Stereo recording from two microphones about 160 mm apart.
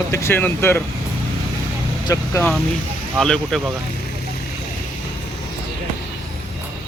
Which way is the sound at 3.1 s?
5° left (ahead or behind).